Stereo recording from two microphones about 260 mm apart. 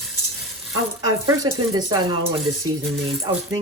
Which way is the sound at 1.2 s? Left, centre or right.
Centre.